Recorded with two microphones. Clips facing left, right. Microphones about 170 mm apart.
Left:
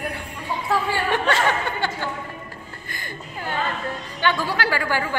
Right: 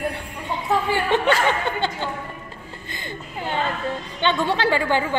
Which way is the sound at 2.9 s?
20° right (ahead or behind).